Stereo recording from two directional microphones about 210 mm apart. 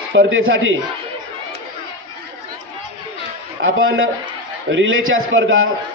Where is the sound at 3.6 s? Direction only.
70° right (ahead or behind).